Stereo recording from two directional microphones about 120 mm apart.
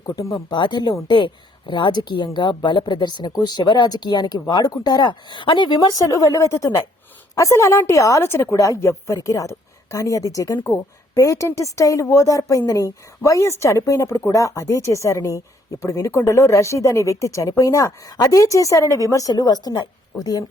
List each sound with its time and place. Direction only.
0.0 s a woman's voice: 30° left (ahead or behind)
0.3 s a woman's voice: 40° left (ahead or behind)